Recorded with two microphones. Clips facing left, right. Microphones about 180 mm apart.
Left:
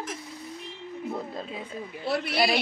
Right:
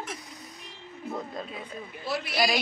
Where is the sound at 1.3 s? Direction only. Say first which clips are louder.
Left 2 dB; 25° left (ahead or behind).